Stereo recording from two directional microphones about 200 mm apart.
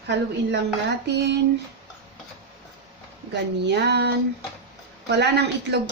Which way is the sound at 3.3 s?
55° right (ahead or behind).